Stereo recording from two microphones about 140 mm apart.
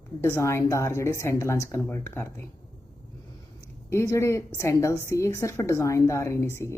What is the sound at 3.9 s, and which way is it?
A woman's voice, 20° left (ahead or behind).